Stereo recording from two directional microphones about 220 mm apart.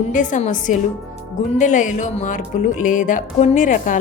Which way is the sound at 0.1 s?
35° left (ahead or behind).